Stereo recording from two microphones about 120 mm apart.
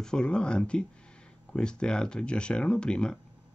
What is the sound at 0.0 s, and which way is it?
Speech, 5° left (ahead or behind).